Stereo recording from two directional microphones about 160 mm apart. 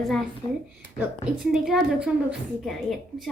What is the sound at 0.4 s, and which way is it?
Speech, 30° left (ahead or behind).